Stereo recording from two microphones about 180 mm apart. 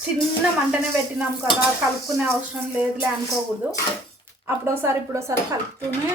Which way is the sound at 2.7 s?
10° right (ahead or behind).